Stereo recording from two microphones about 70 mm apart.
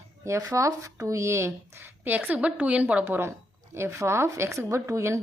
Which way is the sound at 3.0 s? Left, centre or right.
Right.